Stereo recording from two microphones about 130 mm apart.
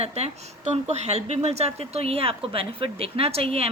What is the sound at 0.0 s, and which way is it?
Speech, 55° right (ahead or behind).